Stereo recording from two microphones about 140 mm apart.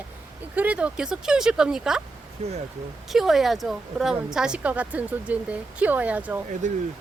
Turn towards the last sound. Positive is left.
turn(degrees=-60)  # may be behind; listen again after turning